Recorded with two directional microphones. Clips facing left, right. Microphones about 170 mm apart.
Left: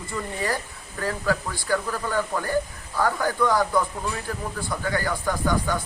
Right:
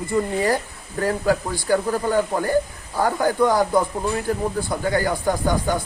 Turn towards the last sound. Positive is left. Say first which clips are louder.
# right 4 dB
turn(degrees=-35)  # may be behind; listen again after turning